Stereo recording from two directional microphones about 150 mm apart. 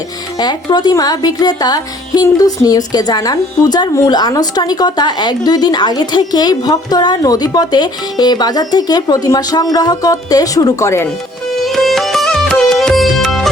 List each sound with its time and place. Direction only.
0.3 s speech: 25° left (ahead or behind)
11.6 s music: centre (ahead or behind)